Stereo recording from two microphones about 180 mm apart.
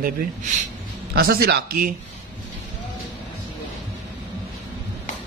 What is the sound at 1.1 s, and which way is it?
Speech, 60° right (ahead or behind).